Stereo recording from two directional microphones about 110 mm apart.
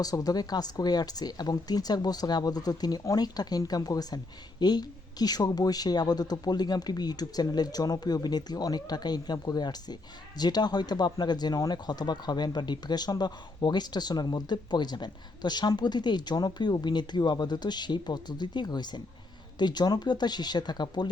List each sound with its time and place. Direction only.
0.0 s speech: 35° left (ahead or behind)